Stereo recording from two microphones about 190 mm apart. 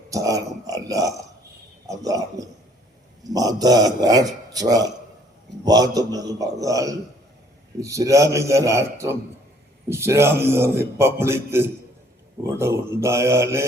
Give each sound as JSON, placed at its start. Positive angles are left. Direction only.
{"t": 0.1, "sound": "a man's voice", "side_deg": -20}